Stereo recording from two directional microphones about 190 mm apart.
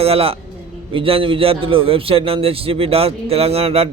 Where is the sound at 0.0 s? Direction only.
30° right (ahead or behind).